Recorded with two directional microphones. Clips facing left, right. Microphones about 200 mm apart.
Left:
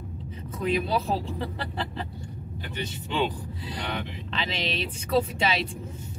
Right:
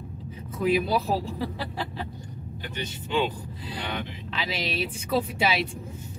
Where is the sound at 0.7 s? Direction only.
5° right (ahead or behind).